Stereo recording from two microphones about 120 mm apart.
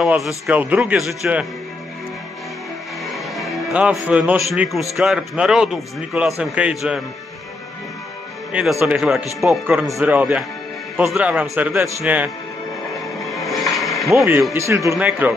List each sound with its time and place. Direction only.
0.0 s a man's voice: 5° right (ahead or behind)
3.1 s music: centre (ahead or behind)
3.7 s a man's voice: 10° right (ahead or behind)
8.5 s a man's voice: 5° right (ahead or behind)
13.5 s music: centre (ahead or behind)
14.1 s speech: 20° right (ahead or behind)
15.0 s a man's voice: 15° right (ahead or behind)